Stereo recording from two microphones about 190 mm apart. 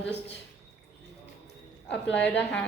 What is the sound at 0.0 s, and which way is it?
Speech, 65° left (ahead or behind).